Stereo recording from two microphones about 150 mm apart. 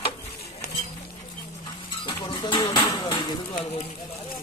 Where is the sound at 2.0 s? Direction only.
30° left (ahead or behind).